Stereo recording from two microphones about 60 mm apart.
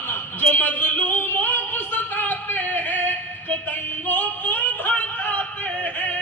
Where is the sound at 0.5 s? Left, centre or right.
Left.